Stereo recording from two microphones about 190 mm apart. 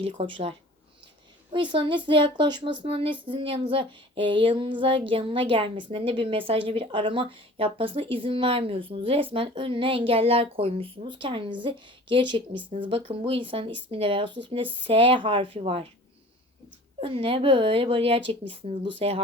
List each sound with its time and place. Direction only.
0.0 s speech: 30° right (ahead or behind)
1.5 s a woman's voice: 25° right (ahead or behind)
17.0 s a woman's voice: 30° right (ahead or behind)